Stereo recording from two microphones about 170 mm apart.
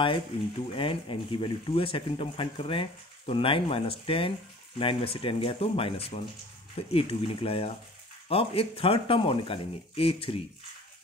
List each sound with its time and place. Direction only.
0.7 s speech: 30° left (ahead or behind)